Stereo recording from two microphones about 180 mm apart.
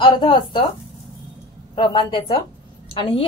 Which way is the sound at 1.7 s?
25° left (ahead or behind).